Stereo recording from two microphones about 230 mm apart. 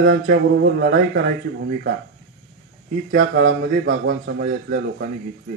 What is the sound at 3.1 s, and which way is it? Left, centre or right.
Speech, right.